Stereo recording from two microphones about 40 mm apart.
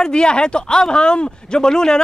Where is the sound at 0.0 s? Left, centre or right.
Left.